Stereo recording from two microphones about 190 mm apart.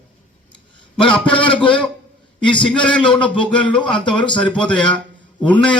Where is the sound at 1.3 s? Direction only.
25° left (ahead or behind).